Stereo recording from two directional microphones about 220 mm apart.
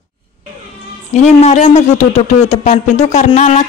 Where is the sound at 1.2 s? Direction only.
30° left (ahead or behind).